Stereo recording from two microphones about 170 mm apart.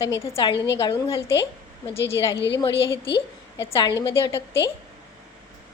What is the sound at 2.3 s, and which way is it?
Speech, 90° left.